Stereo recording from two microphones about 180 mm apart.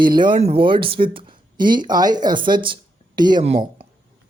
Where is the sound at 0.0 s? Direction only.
25° right (ahead or behind).